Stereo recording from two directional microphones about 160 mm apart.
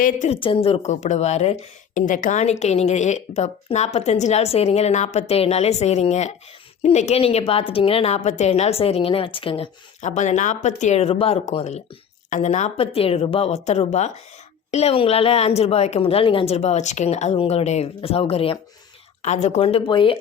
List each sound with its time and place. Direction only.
0.0 s a woman's voice: 50° left (ahead or behind)
0.3 s a woman's voice: 35° left (ahead or behind)
10.0 s a woman's voice: 45° left (ahead or behind); by 20.1 s 30° left (ahead or behind)